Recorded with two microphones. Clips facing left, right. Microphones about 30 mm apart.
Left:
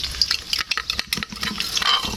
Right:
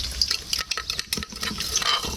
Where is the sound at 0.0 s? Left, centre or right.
Left.